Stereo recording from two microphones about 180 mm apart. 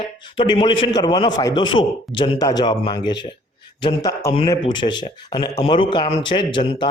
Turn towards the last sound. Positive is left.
turn(degrees=25)  # may be behind; listen again after turning